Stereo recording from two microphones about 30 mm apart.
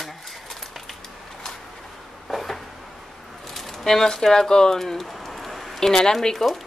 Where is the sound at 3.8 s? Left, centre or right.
Centre.